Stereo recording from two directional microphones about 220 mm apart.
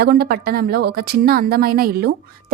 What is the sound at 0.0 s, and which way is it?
A woman's voice, 45° right (ahead or behind).